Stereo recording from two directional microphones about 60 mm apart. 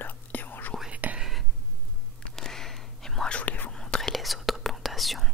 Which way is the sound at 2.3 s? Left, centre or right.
Centre.